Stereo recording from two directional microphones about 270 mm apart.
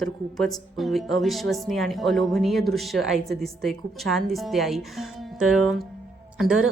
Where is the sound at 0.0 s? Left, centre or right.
Centre.